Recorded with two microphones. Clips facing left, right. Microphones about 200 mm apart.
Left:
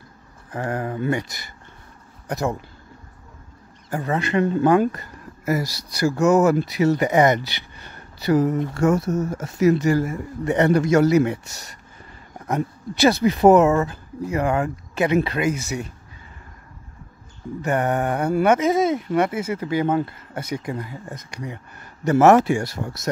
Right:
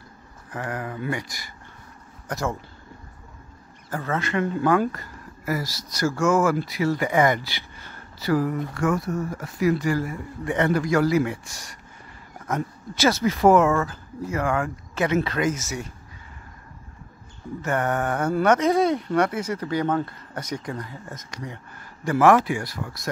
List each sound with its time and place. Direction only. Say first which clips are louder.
0.5 s speech: left 5 dB; 30° left (ahead or behind)
3.9 s speech: left 4 dB; 15° left (ahead or behind)
12.4 s speech: left 3 dB; 15° left (ahead or behind)
17.6 s speech: left 3 dB; 15° left (ahead or behind)
22.0 s speech: left 4 dB; 25° left (ahead or behind)